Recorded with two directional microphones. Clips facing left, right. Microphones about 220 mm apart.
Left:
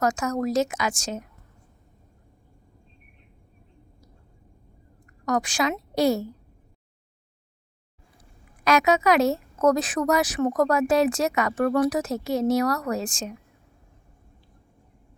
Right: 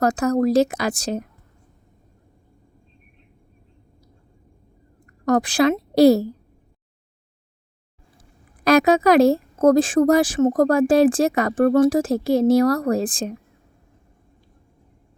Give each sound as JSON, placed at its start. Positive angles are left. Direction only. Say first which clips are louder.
{"t": 0.0, "sound": "speech", "louder": "right 6 dB", "side_deg": -35}
{"t": 5.2, "sound": "a woman's voice", "louder": "right 8 dB", "side_deg": -35}
{"t": 8.2, "sound": "a woman's voice", "louder": "right 5 dB", "side_deg": -35}